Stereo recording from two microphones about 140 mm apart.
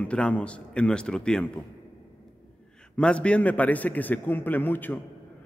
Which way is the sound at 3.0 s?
10° left (ahead or behind).